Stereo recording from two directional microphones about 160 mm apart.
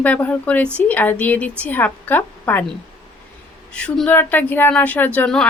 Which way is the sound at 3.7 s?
5° left (ahead or behind).